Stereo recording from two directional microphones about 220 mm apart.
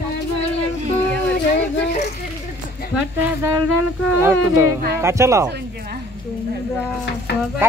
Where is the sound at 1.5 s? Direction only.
30° left (ahead or behind).